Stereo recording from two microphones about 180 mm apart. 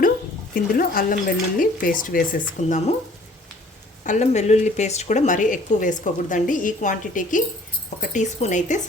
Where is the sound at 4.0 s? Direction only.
40° left (ahead or behind).